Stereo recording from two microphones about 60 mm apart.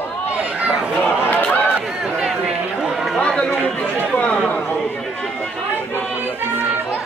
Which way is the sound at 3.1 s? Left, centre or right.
Centre.